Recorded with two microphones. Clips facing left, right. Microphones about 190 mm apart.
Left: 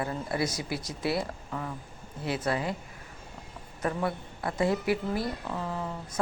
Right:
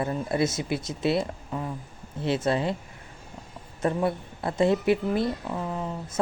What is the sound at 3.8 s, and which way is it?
A woman's voice, 25° right (ahead or behind).